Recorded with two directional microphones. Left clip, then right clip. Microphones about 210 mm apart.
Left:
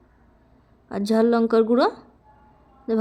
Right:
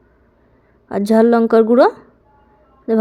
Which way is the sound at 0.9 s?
15° right (ahead or behind).